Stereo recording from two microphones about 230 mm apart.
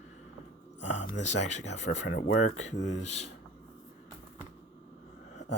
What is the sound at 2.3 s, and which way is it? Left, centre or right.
Speech, left.